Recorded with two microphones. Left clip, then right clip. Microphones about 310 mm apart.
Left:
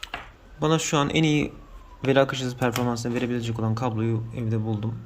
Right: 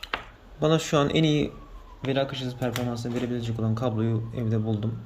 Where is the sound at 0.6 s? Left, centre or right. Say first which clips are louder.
Even; centre.